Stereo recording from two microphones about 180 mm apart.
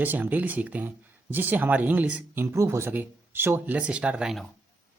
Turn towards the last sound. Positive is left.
turn(degrees=0)  # may be behind; listen again after turning